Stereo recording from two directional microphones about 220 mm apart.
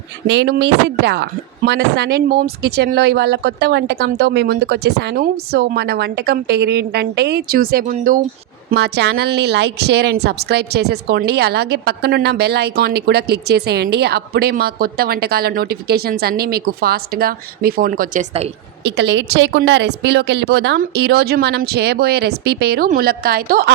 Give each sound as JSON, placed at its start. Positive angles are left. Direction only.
{"t": 0.3, "sound": "a woman's voice", "side_deg": -50}
{"t": 8.7, "sound": "a woman's voice", "side_deg": -50}
{"t": 18.8, "sound": "a woman's voice", "side_deg": -50}